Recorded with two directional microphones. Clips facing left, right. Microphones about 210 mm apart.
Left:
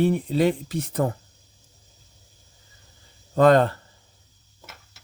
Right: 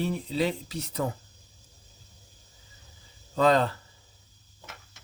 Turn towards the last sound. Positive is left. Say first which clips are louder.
# left 6 dB
turn(degrees=55)  # may be behind; listen again after turning